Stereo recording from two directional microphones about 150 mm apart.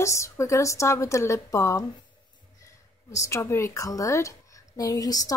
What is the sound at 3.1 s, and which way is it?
A woman's voice, 20° left (ahead or behind).